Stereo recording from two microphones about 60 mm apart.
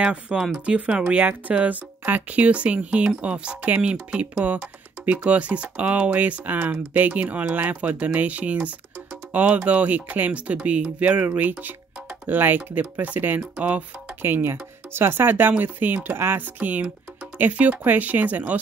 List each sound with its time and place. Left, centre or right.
0.0 s speech: centre
14.2 s speech: right